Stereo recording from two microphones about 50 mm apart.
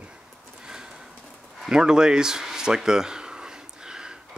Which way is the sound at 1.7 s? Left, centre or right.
Centre.